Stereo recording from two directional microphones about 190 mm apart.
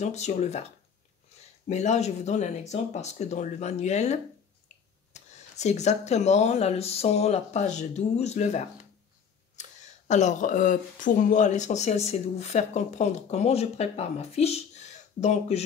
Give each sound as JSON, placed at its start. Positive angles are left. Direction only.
{"t": 0.0, "sound": "speech", "side_deg": 35}
{"t": 1.7, "sound": "speech", "side_deg": 35}